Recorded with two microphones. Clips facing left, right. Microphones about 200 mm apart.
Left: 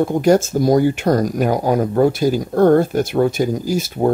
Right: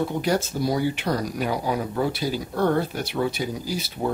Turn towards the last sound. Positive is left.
turn(degrees=45)  # may be behind; listen again after turning